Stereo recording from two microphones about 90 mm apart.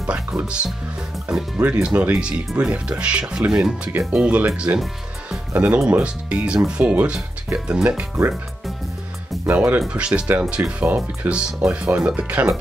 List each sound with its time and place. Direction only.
0.0 s speech: 15° right (ahead or behind)
9.5 s speech: 20° right (ahead or behind)